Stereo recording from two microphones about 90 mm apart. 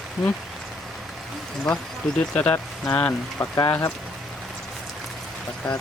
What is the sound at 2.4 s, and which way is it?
Speech, 15° left (ahead or behind).